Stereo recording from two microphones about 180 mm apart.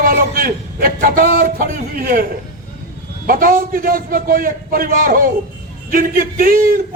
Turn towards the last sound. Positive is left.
turn(degrees=-55)  # may be behind; listen again after turning